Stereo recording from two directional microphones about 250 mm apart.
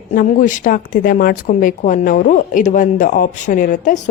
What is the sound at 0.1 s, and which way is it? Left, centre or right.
Speech, left.